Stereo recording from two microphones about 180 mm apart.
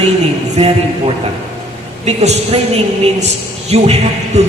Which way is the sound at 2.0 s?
35° right (ahead or behind).